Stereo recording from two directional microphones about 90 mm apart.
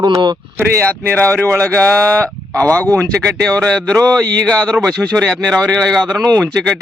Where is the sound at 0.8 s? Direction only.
15° left (ahead or behind).